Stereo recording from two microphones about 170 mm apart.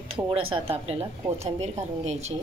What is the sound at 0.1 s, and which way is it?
A woman's voice, 35° right (ahead or behind).